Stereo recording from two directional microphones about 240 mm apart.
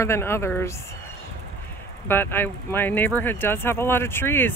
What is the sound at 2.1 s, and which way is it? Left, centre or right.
Speech, centre.